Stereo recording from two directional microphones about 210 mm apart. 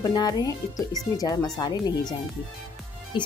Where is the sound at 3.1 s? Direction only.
25° left (ahead or behind).